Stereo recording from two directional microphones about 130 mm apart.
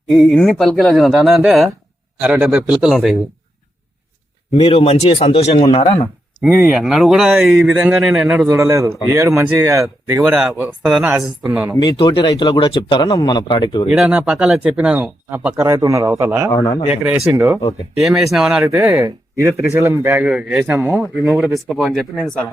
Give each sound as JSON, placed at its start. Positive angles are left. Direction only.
{"t": 0.1, "sound": "speech", "side_deg": 0}
{"t": 4.5, "sound": "speech", "side_deg": 45}
{"t": 6.4, "sound": "speech", "side_deg": -15}
{"t": 8.4, "sound": "speech", "side_deg": -20}
{"t": 11.8, "sound": "speech", "side_deg": 40}
{"t": 13.8, "sound": "speech", "side_deg": -5}
{"t": 16.5, "sound": "speech", "side_deg": 25}
{"t": 16.9, "sound": "speech", "side_deg": -10}
{"t": 18.6, "sound": "speech", "side_deg": -15}
{"t": 20.3, "sound": "speech", "side_deg": -5}